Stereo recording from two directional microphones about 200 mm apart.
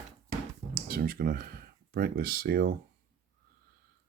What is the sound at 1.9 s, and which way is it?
Speech, 50° right (ahead or behind).